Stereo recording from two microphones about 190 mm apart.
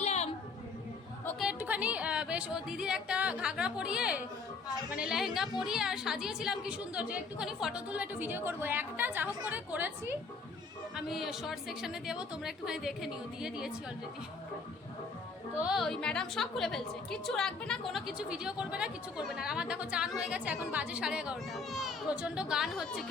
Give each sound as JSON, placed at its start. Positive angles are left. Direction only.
{"t": 0.0, "sound": "a sound", "side_deg": 35}
{"t": 1.4, "sound": "a woman's voice", "side_deg": -5}
{"t": 10.9, "sound": "a woman's voice", "side_deg": 0}
{"t": 15.5, "sound": "a woman's voice", "side_deg": -5}